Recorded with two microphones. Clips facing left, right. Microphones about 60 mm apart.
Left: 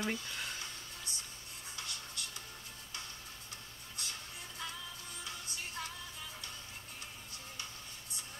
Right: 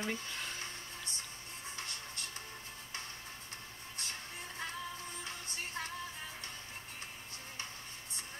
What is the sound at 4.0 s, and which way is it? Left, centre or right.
Music, right.